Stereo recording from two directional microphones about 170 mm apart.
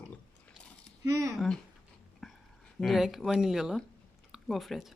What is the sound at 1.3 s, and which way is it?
Speech, centre (ahead or behind).